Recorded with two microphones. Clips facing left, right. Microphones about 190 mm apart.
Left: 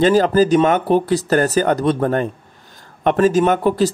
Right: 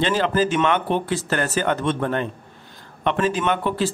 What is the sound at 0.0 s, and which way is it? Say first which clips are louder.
Speech: left 7 dB; 40° left (ahead or behind).